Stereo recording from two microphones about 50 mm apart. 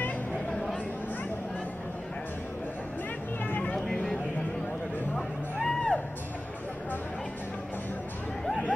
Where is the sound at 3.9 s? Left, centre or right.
Left.